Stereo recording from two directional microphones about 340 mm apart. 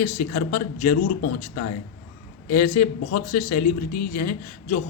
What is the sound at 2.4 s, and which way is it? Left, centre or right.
A man's voice, left.